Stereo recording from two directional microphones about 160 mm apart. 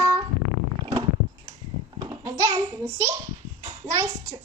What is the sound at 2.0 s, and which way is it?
Babbling, 25° right (ahead or behind).